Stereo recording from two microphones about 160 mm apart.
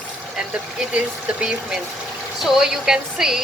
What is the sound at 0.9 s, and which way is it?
Speech, 5° right (ahead or behind).